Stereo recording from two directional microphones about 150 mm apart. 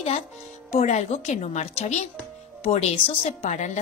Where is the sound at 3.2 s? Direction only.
50° left (ahead or behind).